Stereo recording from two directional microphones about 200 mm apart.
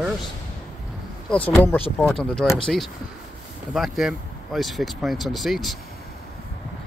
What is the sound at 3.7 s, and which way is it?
Speech, centre (ahead or behind).